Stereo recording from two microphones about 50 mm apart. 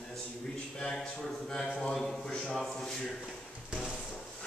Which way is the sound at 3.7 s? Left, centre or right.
Centre.